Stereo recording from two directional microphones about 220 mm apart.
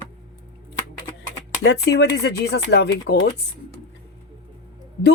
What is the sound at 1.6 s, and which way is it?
Speech, 50° left (ahead or behind).